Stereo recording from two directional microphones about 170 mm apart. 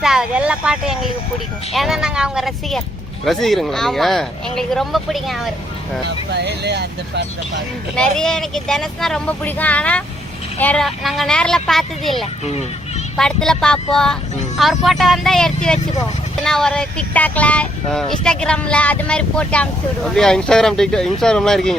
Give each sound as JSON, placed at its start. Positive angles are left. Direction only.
{"t": 0.0, "sound": "speech", "side_deg": -5}
{"t": 6.3, "sound": "speech", "side_deg": -80}
{"t": 7.9, "sound": "speech", "side_deg": 5}